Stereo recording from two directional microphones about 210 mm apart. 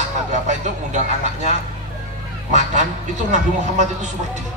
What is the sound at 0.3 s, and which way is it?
Speech, 35° right (ahead or behind).